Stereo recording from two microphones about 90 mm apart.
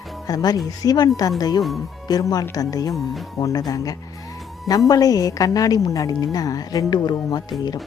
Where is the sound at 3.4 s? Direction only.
45° left (ahead or behind).